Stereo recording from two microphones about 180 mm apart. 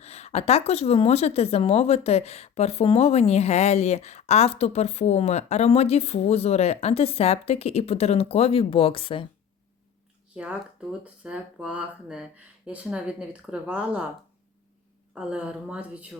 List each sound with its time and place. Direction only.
0.0 s a woman's voice: 35° left (ahead or behind)
10.3 s speech: 5° right (ahead or behind)
15.1 s speech: 5° right (ahead or behind)